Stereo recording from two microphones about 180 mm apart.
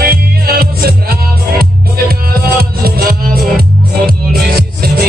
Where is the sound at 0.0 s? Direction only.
55° right (ahead or behind).